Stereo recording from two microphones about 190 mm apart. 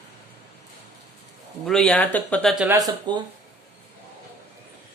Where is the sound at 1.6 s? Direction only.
5° left (ahead or behind).